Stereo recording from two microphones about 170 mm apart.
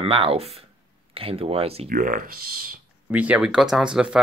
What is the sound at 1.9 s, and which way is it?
Speech, 55° right (ahead or behind).